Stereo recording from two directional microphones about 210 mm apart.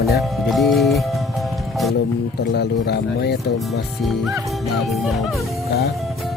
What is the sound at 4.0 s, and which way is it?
Speech, centre (ahead or behind).